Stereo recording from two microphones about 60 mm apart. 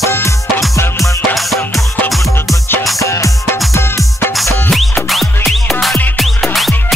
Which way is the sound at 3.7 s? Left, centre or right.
Left.